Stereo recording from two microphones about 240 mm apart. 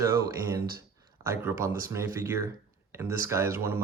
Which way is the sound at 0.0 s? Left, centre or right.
Centre.